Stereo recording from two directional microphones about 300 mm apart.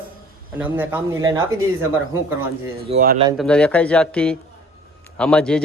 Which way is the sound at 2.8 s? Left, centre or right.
Right.